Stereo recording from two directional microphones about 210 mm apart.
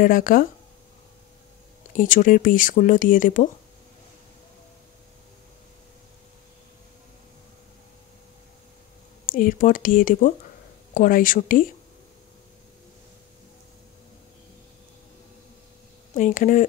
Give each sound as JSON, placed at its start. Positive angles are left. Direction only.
{"t": 0.0, "sound": "speech", "side_deg": 40}
{"t": 2.0, "sound": "speech", "side_deg": 40}
{"t": 9.3, "sound": "speech", "side_deg": 40}
{"t": 16.2, "sound": "speech", "side_deg": 35}